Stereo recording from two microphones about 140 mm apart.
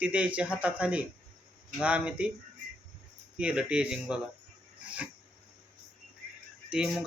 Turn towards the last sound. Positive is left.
turn(degrees=-5)  # may be behind; listen again after turning